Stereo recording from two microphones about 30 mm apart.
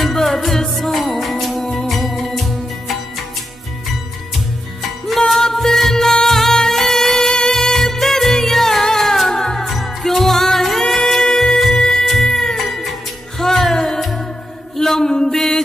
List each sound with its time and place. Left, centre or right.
0.0 s music: centre
5.3 s music: centre
9.7 s music: centre